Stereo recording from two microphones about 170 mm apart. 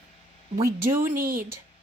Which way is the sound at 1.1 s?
55° right (ahead or behind).